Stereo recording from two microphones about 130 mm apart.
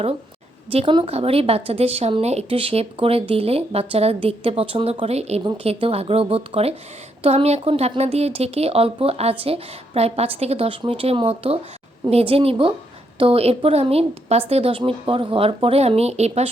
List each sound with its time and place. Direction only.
0.7 s a woman's voice: 45° right (ahead or behind)